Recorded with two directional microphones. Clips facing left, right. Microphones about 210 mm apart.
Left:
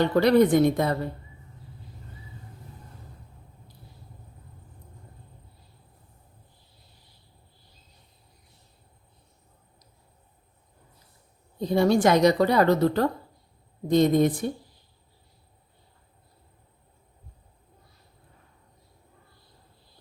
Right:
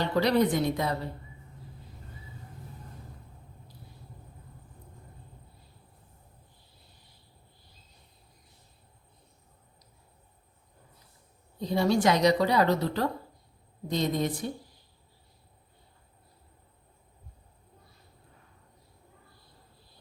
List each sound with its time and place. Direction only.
0.0 s a woman's voice: 55° left (ahead or behind)
11.6 s a woman's voice: 50° left (ahead or behind)